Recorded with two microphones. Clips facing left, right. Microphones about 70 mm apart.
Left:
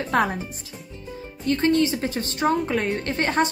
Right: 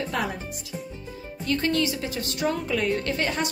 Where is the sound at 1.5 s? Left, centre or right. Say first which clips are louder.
Left 4 dB; left.